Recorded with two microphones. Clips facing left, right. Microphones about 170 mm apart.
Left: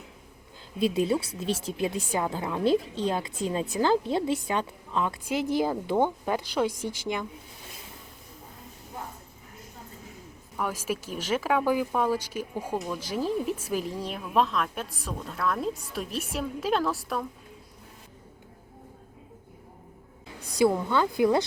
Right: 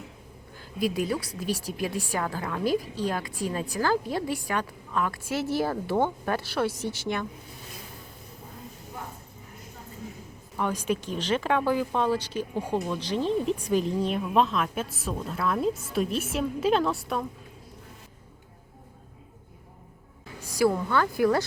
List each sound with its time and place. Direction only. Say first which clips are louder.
0.8 s a woman's voice: left 2 dB; 25° left (ahead or behind)
10.6 s speech: right 3 dB; 5° left (ahead or behind)
20.6 s a woman's voice: left 1 dB; 20° left (ahead or behind)